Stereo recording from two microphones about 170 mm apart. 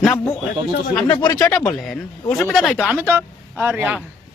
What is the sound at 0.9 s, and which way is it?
Speech, 10° left (ahead or behind).